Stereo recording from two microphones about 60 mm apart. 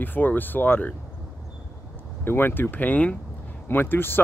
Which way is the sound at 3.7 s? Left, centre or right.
Left.